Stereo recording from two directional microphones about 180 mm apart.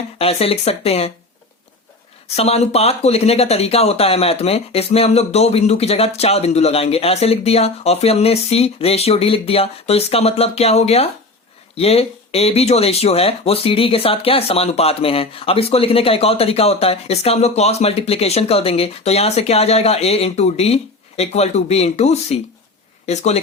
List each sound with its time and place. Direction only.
0.2 s speech: 35° left (ahead or behind)
2.2 s speech: 35° left (ahead or behind)